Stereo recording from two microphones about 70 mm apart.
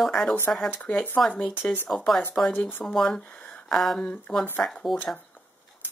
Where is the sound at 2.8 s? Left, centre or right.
Centre.